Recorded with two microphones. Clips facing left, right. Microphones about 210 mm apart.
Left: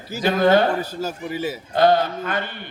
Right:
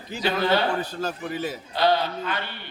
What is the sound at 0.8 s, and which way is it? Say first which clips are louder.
Speech: left 2 dB; 10° left (ahead or behind).